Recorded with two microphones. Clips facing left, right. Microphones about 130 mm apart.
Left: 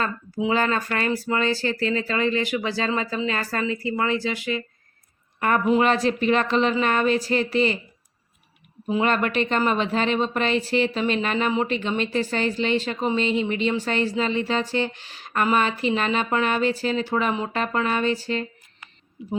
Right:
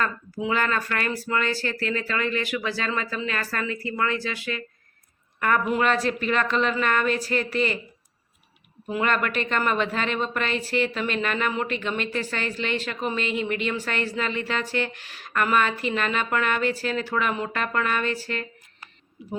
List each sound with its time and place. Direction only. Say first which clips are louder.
0.0 s a woman's voice: left 2 dB; 25° left (ahead or behind)
8.9 s speech: left 3 dB; 30° left (ahead or behind)